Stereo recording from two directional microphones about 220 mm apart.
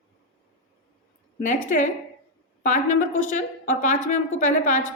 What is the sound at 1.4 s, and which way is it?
Speech, 35° left (ahead or behind).